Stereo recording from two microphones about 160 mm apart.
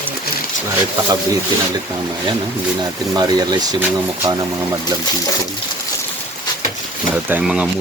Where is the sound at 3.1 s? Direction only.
25° right (ahead or behind).